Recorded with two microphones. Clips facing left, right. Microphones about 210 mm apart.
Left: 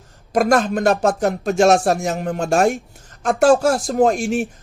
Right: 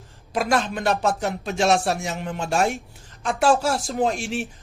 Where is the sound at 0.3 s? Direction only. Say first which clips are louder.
Left 7 dB; 50° left (ahead or behind).